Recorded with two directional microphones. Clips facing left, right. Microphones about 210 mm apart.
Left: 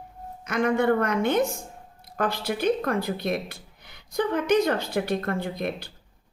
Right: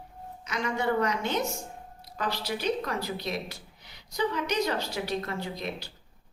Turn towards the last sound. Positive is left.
turn(degrees=55)  # may be behind; listen again after turning